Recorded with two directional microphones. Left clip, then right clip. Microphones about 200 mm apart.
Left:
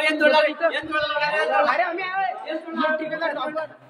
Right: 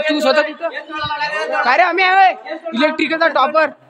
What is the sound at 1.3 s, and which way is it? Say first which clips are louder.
Speech: right 6 dB; 50° right (ahead or behind).